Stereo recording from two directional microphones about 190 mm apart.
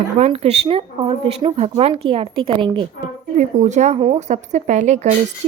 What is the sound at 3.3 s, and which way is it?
Speech, 40° right (ahead or behind).